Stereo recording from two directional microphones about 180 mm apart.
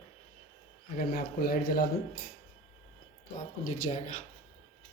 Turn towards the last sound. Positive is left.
turn(degrees=40)  # may be behind; listen again after turning